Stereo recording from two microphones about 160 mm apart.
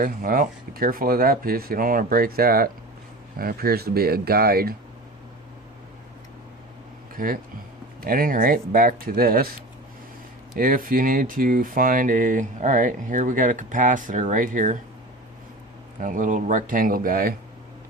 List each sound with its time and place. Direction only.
0.0 s speech: 60° right (ahead or behind)
8.0 s speech: 65° right (ahead or behind)
16.0 s speech: 55° right (ahead or behind)